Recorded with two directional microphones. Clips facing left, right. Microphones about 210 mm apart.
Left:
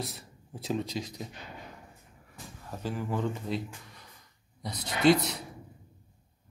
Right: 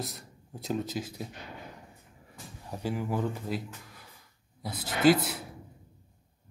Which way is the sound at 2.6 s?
15° right (ahead or behind).